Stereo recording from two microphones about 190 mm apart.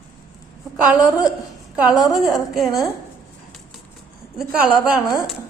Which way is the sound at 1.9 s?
20° left (ahead or behind).